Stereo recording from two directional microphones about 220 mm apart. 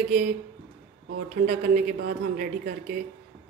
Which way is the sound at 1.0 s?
40° right (ahead or behind).